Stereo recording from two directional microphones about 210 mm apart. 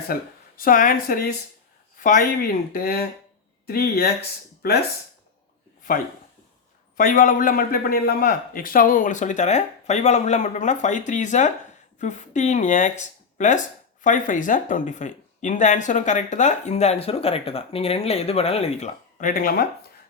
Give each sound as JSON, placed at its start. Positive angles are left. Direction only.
{"t": 0.1, "sound": "speech", "side_deg": 45}
{"t": 6.9, "sound": "speech", "side_deg": 40}